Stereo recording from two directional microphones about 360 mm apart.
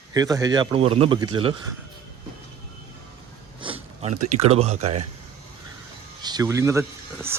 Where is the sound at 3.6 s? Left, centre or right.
Centre.